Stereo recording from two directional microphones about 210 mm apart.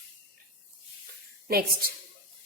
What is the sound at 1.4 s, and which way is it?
Speech, 45° right (ahead or behind).